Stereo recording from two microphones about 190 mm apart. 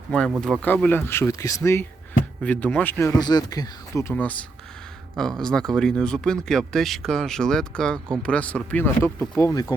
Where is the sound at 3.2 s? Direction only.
20° left (ahead or behind).